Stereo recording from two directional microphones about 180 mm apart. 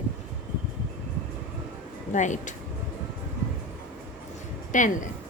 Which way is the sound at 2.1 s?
45° left (ahead or behind).